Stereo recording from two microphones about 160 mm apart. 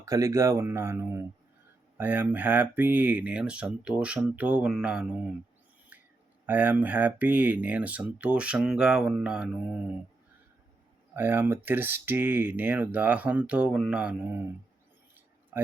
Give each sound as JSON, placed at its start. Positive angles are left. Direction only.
{"t": 0.0, "sound": "speech", "side_deg": -20}
{"t": 6.4, "sound": "speech", "side_deg": -10}
{"t": 11.1, "sound": "speech", "side_deg": -10}
{"t": 15.1, "sound": "a sound", "side_deg": -10}